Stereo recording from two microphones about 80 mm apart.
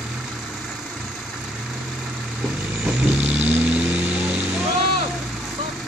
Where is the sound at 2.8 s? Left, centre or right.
Centre.